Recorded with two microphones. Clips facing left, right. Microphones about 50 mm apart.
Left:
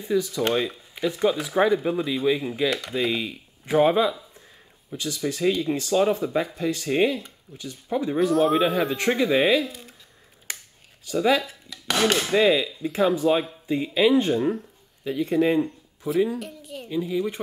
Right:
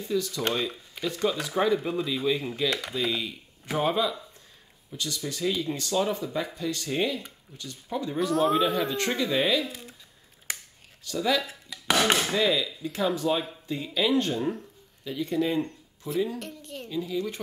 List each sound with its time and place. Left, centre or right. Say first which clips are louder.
0.0 s speech: left 4 dB; centre
8.3 s speech: left 2 dB; centre
8.9 s speech: left 5 dB; left
9.2 s speech: left 6 dB; centre
11.1 s speech: left 5 dB; centre
11.7 s chopping: even; centre
12.3 s speech: left 6 dB; left
15.6 s a sound: left 7 dB; centre
16.3 s speech: left 3 dB; centre
16.9 s speech: left 5 dB; left